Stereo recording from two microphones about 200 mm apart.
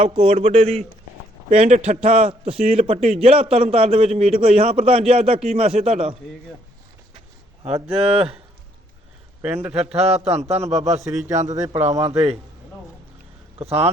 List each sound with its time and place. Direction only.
0.0 s a man's voice: 25° right (ahead or behind)
7.6 s a man's voice: 30° right (ahead or behind)
9.7 s a man's voice: 30° right (ahead or behind)
11.5 s a man's voice: 20° right (ahead or behind)
12.0 s a man's voice: 30° right (ahead or behind)
13.6 s a man's voice: 30° right (ahead or behind)